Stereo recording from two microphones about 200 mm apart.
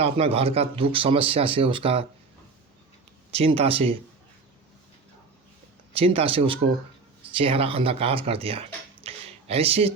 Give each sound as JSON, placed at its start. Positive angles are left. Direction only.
{"t": 0.0, "sound": "speech", "side_deg": -30}
{"t": 3.3, "sound": "speech", "side_deg": -30}
{"t": 6.1, "sound": "speech", "side_deg": -25}